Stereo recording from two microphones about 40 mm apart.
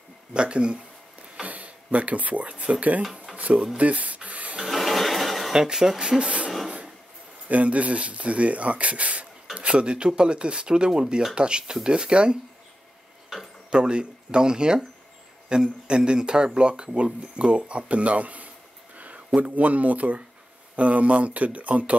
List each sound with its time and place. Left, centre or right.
0.3 s speech: right
3.7 s rub: right
4.6 s a sound: centre
5.5 s speech: centre
13.7 s speech: right
18.9 s a sound: right
19.4 s speech: right